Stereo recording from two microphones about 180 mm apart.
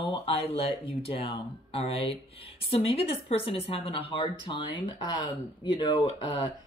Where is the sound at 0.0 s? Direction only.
35° left (ahead or behind).